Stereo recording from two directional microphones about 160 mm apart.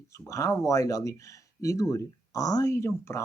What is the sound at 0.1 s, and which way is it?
Speech, 20° left (ahead or behind).